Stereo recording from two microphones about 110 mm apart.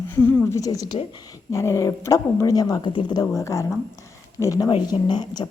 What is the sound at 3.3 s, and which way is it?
A woman's voice, 30° left (ahead or behind).